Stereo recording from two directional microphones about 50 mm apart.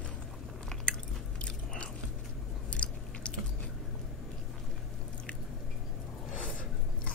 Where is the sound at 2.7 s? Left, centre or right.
Left.